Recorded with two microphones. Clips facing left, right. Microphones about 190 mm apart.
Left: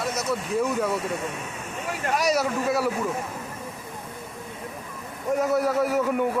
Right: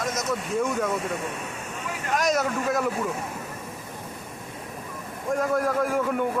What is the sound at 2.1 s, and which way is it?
Speech, centre (ahead or behind).